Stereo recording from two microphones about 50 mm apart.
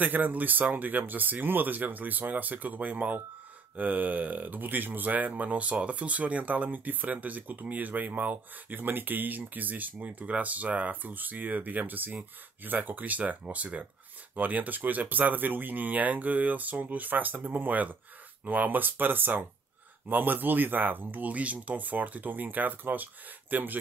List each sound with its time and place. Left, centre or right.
0.0 s speech: right